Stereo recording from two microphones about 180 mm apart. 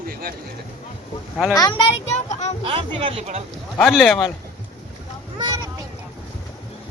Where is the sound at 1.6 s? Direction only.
20° left (ahead or behind).